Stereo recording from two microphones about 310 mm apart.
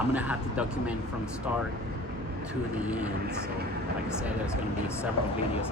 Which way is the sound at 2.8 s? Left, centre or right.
Centre.